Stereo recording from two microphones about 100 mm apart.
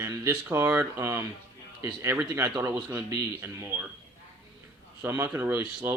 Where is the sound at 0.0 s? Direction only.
25° right (ahead or behind).